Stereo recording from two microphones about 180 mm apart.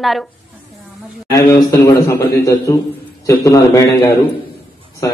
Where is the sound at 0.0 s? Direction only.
Centre (ahead or behind).